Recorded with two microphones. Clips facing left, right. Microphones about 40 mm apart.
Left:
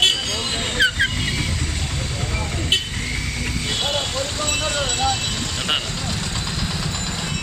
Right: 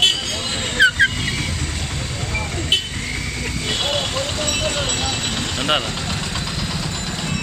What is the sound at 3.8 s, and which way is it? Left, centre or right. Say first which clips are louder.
Speech: right 2 dB; right.